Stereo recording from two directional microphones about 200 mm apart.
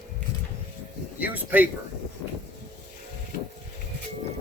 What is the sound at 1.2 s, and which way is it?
Speech, 10° right (ahead or behind).